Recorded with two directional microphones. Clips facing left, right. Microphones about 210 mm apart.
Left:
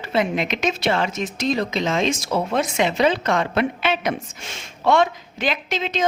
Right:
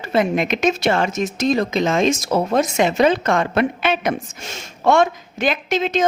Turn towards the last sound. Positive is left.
turn(degrees=-50)  # may be behind; listen again after turning